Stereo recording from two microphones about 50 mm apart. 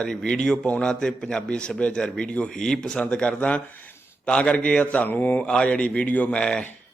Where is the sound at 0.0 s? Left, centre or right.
Centre; by 6.4 s left.